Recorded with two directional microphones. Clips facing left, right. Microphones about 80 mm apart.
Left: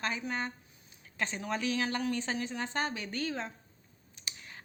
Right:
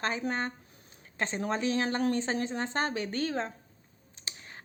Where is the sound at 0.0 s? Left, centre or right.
Right.